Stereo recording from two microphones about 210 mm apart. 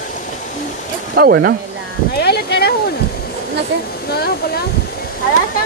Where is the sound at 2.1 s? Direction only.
50° left (ahead or behind).